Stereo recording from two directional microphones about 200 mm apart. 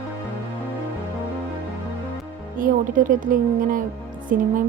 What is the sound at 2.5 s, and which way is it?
A woman's voice, 45° right (ahead or behind).